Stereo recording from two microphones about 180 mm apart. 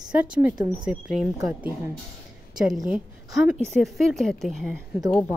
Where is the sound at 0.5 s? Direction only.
25° right (ahead or behind).